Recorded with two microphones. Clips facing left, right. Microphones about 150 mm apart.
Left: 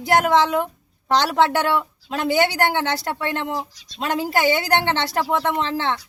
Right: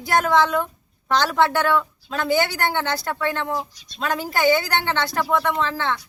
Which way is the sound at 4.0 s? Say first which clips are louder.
Left 1 dB; 25° left (ahead or behind).